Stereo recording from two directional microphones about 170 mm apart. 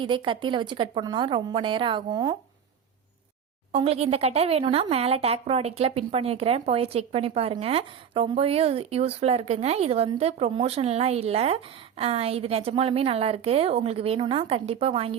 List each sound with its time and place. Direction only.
0.0 s speech: 30° right (ahead or behind)
3.7 s speech: 35° right (ahead or behind)